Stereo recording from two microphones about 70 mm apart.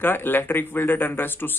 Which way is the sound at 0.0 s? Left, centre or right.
Left.